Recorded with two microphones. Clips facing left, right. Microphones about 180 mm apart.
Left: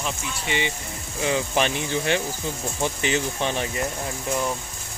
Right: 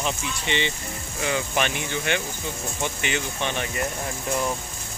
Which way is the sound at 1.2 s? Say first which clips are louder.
Left 2 dB; 30° left (ahead or behind).